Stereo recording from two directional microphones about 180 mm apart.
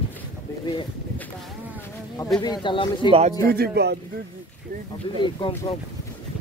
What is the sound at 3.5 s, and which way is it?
Speech, 60° right (ahead or behind).